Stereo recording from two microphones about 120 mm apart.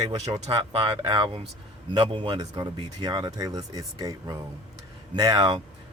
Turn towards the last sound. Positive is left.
turn(degrees=-40)  # may be behind; listen again after turning